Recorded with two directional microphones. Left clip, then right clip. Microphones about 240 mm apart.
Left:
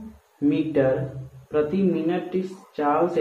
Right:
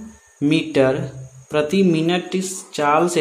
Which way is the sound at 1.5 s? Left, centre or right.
Right.